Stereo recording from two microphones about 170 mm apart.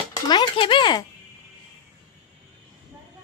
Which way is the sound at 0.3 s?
25° left (ahead or behind).